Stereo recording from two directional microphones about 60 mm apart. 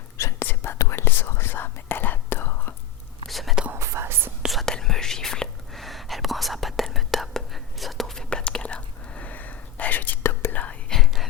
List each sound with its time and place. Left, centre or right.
0.3 s whispering: left
3.2 s whispering: centre
3.8 s whispering: right
4.4 s whispering: centre; by 10.8 s left
11.0 s a sound: centre